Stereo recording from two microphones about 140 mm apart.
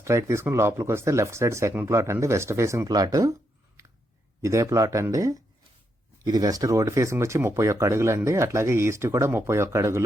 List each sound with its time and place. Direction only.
0.0 s speech: 20° right (ahead or behind)
4.4 s speech: 20° right (ahead or behind)